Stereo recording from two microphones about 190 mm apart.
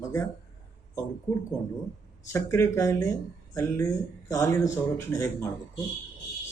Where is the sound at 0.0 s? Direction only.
15° left (ahead or behind).